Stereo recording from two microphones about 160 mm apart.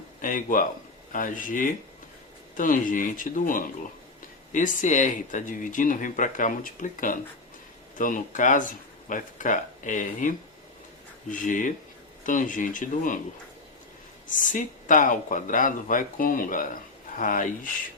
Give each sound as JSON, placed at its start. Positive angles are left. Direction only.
{"t": 0.2, "sound": "speech", "side_deg": 55}
{"t": 14.3, "sound": "speech", "side_deg": 55}